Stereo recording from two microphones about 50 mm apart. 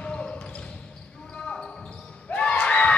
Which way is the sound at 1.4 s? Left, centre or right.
Centre.